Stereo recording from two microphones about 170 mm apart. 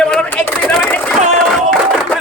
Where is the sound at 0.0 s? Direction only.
5° left (ahead or behind).